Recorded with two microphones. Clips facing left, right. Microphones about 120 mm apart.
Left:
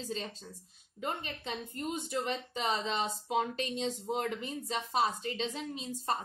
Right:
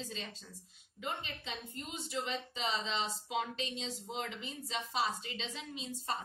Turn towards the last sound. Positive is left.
turn(degrees=45)  # may be behind; listen again after turning